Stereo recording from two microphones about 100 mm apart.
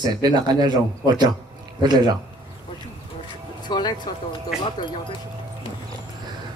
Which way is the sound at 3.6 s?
45° left (ahead or behind).